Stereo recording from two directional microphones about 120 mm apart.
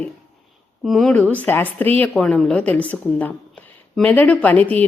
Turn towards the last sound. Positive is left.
turn(degrees=15)  # may be behind; listen again after turning